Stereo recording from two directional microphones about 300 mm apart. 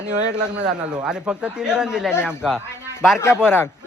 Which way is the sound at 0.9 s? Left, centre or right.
Centre.